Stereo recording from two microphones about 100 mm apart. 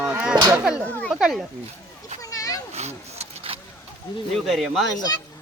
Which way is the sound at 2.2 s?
35° left (ahead or behind).